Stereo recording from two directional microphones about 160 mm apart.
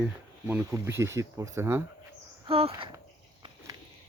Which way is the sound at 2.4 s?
35° right (ahead or behind).